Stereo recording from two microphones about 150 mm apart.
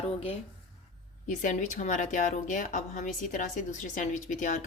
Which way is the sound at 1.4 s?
55° left (ahead or behind).